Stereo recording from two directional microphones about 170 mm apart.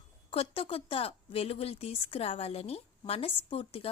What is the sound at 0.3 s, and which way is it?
A woman's voice, 35° left (ahead or behind).